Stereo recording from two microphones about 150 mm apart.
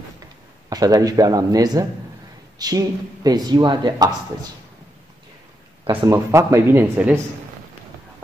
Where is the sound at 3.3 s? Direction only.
25° right (ahead or behind).